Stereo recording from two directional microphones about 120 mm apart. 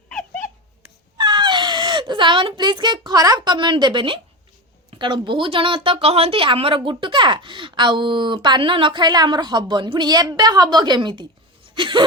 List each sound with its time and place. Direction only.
1.2 s speech: 40° right (ahead or behind)